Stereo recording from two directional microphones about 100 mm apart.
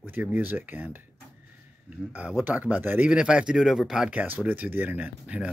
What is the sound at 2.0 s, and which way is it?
Speech, 15° right (ahead or behind).